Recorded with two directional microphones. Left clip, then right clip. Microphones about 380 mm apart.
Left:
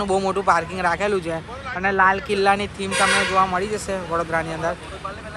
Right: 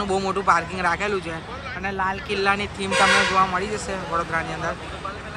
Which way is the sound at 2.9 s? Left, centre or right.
Right.